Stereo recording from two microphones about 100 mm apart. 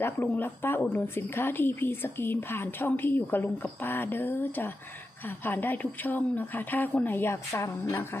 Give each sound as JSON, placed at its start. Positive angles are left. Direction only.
{"t": 0.0, "sound": "a woman's voice", "side_deg": 20}